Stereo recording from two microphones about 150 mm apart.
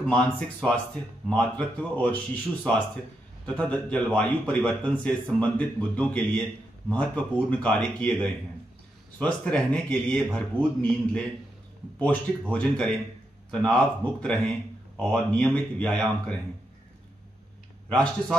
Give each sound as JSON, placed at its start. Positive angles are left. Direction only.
{"t": 0.0, "sound": "a man's voice", "side_deg": 5}